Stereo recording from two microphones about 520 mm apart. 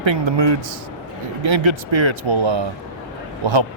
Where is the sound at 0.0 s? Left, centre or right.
Right.